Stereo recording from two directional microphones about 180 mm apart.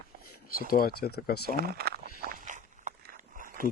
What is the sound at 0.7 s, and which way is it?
Speech, 55° left (ahead or behind).